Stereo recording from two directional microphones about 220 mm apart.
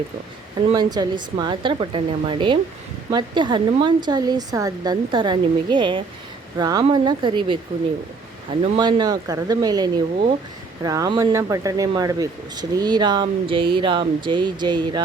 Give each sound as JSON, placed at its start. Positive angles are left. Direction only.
{"t": 0.7, "sound": "speech", "side_deg": -20}
{"t": 8.8, "sound": "speech", "side_deg": -20}